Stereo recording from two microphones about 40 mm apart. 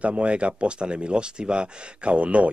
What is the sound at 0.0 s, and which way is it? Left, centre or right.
Speech, right.